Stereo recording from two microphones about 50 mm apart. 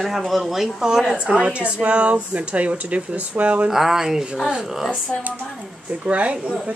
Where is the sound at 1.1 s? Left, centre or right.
Right.